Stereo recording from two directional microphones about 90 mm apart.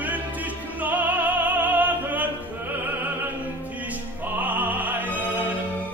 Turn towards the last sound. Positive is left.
turn(degrees=-20)  # may be behind; listen again after turning